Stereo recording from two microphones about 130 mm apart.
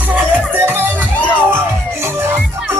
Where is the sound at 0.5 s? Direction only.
15° right (ahead or behind).